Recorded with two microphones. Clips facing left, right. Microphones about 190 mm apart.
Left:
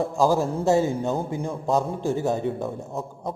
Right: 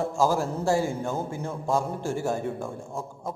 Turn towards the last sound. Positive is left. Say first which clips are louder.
# left 3 dB
turn(degrees=20)  # may be behind; listen again after turning